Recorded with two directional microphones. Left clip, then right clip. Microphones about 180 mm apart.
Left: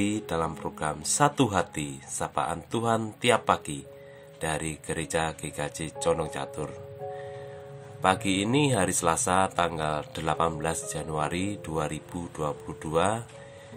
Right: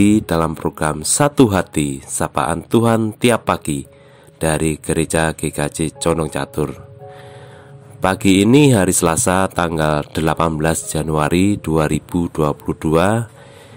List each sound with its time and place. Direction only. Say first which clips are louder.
0.0 s speech: right 13 dB; 55° right (ahead or behind)
8.0 s speech: right 10 dB; 55° right (ahead or behind)